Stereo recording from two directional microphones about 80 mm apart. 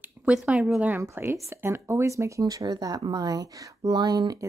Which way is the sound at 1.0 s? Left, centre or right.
Right.